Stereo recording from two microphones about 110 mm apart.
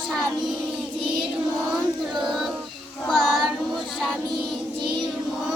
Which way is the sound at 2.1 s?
Centre (ahead or behind).